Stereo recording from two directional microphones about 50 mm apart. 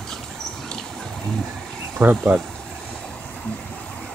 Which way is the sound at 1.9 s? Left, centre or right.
Right.